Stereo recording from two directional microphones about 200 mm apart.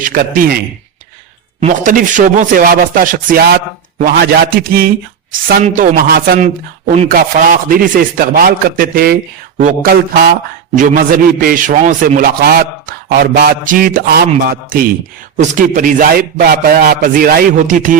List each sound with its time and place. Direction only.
0.0 s speech: 45° right (ahead or behind)
1.6 s speech: 40° right (ahead or behind)
6.4 s speech: 35° right (ahead or behind)
7.1 s speech: 45° right (ahead or behind)